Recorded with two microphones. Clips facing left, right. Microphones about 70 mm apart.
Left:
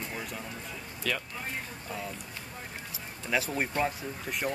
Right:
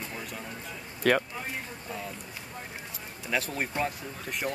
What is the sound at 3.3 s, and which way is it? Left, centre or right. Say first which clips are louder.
Speech: left 1 dB; centre.